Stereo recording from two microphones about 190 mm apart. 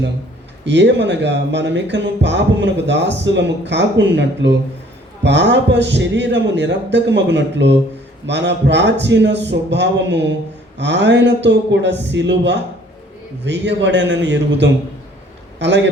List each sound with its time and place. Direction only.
0.6 s a man's voice: 65° right (ahead or behind)